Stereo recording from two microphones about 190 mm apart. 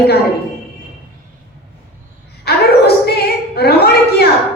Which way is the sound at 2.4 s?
55° left (ahead or behind).